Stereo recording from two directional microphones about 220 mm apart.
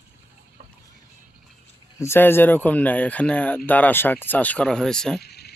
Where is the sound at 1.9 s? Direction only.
10° left (ahead or behind).